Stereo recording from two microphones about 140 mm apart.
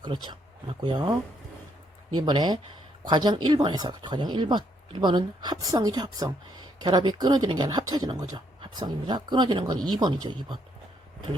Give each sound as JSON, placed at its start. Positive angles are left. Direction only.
{"t": 0.0, "sound": "speech", "side_deg": -35}
{"t": 2.1, "sound": "speech", "side_deg": -35}